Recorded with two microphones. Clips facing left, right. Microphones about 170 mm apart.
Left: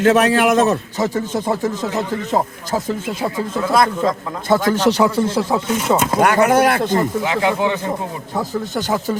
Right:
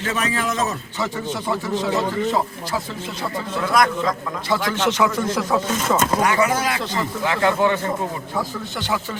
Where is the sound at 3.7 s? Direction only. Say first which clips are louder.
Left 3 dB; 25° left (ahead or behind).